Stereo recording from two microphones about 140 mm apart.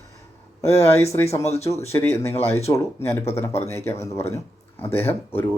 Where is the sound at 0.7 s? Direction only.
50° left (ahead or behind).